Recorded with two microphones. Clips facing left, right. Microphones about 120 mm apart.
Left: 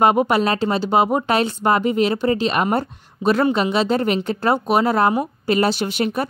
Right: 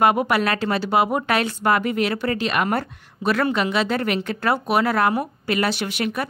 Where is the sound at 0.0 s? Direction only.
25° left (ahead or behind).